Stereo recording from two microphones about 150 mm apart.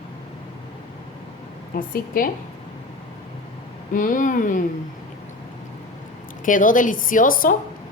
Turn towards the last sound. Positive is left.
turn(degrees=70)  # may be behind; listen again after turning